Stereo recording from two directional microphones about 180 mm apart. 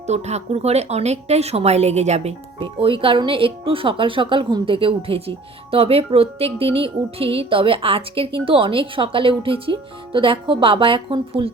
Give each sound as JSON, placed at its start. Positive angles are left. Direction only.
{"t": 0.1, "sound": "a woman's voice", "side_deg": -40}